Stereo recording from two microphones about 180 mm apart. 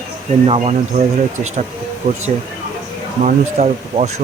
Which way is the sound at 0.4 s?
35° right (ahead or behind).